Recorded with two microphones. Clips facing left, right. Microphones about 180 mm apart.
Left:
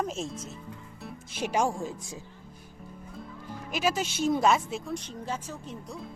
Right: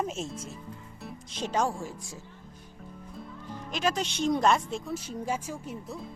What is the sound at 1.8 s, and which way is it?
Speech, 20° left (ahead or behind).